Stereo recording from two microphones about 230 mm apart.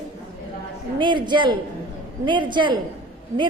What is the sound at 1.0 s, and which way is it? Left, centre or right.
A woman's voice, centre.